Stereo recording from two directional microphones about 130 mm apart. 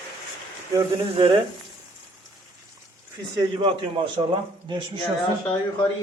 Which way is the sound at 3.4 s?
40° right (ahead or behind).